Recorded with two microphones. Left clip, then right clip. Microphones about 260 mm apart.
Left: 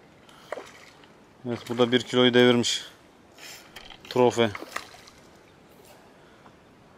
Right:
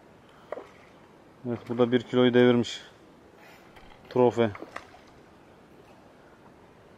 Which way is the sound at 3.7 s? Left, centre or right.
Centre.